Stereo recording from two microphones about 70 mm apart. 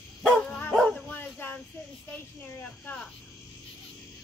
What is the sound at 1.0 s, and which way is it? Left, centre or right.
Dog, left.